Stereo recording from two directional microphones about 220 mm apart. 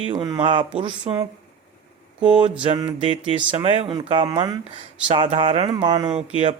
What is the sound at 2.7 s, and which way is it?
Speech, 20° right (ahead or behind).